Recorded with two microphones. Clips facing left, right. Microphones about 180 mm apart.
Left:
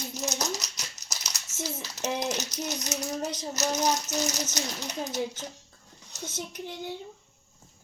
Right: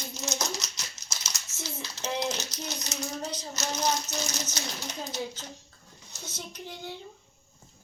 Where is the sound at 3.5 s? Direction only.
40° left (ahead or behind).